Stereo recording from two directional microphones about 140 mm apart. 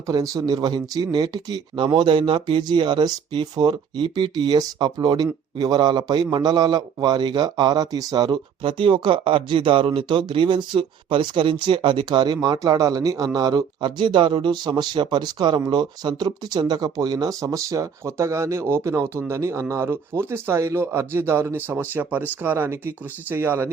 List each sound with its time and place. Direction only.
0.1 s speech: 30° right (ahead or behind)